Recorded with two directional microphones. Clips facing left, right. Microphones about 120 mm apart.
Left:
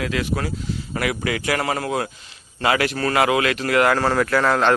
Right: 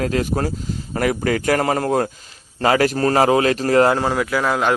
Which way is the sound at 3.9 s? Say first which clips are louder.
Left 1 dB; 15° right (ahead or behind).